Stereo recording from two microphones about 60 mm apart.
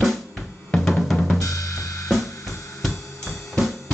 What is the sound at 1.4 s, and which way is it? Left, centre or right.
Drum kit, left.